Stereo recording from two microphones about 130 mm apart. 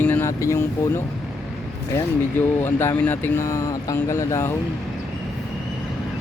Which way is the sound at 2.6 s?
15° left (ahead or behind).